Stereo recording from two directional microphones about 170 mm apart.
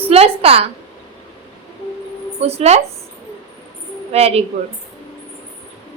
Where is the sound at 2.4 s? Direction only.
40° right (ahead or behind).